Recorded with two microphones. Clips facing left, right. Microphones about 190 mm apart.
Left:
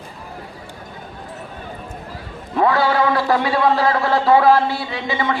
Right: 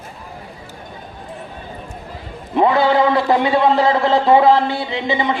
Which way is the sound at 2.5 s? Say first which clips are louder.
Right 3 dB; 20° right (ahead or behind).